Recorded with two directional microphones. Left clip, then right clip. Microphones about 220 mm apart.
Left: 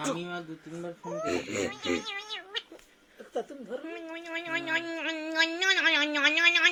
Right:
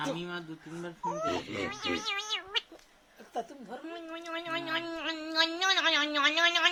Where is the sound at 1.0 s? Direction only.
50° right (ahead or behind).